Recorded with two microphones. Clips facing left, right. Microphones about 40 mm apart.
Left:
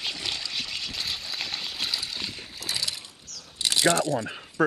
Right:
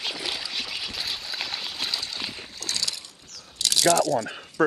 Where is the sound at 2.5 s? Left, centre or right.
Centre.